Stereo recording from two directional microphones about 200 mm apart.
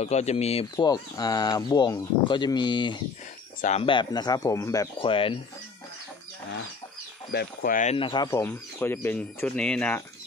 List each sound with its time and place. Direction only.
0.0 s speech: 35° left (ahead or behind)
7.3 s speech: 45° left (ahead or behind); by 10.0 s 5° left (ahead or behind)